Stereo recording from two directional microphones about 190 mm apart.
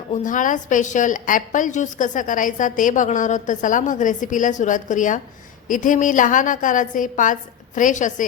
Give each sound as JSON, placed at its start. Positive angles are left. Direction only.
{"t": 0.1, "sound": "a woman's voice", "side_deg": 45}